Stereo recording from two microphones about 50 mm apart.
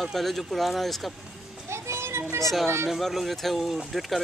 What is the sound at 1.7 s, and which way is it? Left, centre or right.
Children playing, right.